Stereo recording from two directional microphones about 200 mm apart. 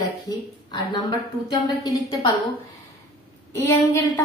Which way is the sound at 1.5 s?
20° left (ahead or behind).